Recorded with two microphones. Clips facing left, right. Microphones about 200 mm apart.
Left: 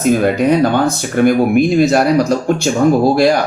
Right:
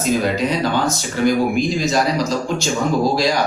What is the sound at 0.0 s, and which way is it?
Speech, 55° left (ahead or behind).